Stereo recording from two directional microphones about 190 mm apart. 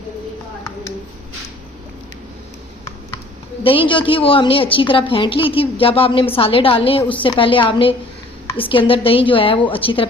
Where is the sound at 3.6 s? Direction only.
30° left (ahead or behind).